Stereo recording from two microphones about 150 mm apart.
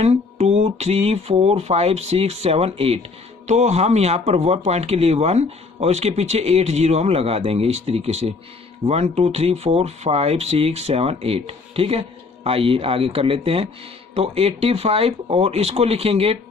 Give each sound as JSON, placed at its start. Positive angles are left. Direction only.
{"t": 0.0, "sound": "speech", "side_deg": -45}